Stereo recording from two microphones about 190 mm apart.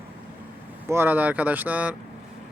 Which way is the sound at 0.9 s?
10° right (ahead or behind).